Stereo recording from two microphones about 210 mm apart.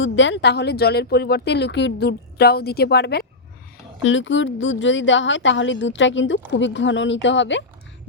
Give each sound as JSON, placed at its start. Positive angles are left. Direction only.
{"t": 0.0, "sound": "speech", "side_deg": 60}
{"t": 4.0, "sound": "a woman's voice", "side_deg": 60}